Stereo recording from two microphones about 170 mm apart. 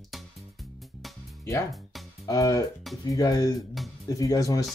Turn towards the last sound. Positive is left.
turn(degrees=20)  # may be behind; listen again after turning